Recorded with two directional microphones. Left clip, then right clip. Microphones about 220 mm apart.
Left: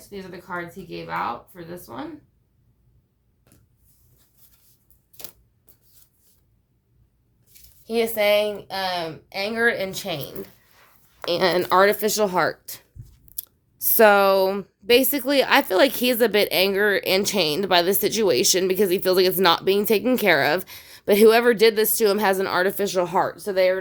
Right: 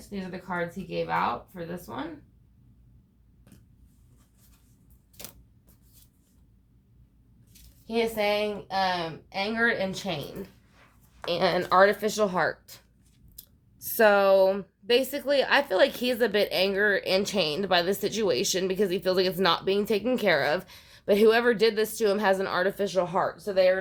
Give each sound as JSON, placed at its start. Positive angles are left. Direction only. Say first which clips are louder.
{"t": 0.1, "sound": "a woman's voice", "louder": "left 1 dB", "side_deg": 25}
{"t": 7.9, "sound": "speech", "louder": "left 6 dB", "side_deg": 50}